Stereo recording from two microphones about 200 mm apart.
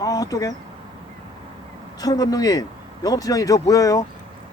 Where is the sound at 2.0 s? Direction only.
20° left (ahead or behind).